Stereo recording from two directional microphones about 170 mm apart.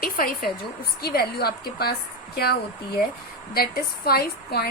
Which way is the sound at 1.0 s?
65° left (ahead or behind).